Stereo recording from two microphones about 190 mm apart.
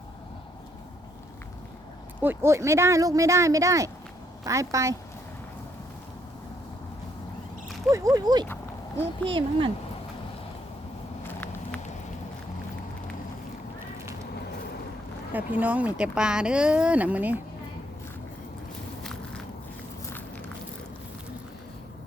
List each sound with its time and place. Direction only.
2.2 s speech: 10° right (ahead or behind)
7.9 s speech: 15° right (ahead or behind)
15.3 s speech: 10° right (ahead or behind)